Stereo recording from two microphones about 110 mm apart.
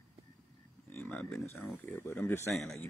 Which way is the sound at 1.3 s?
25° left (ahead or behind).